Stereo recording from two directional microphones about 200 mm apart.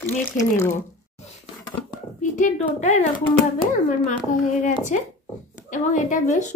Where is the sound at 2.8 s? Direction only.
35° left (ahead or behind).